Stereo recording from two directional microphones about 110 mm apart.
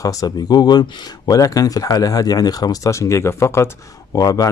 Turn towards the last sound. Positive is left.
turn(degrees=35)  # may be behind; listen again after turning